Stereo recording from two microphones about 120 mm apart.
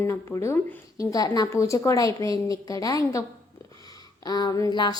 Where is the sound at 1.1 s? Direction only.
30° left (ahead or behind).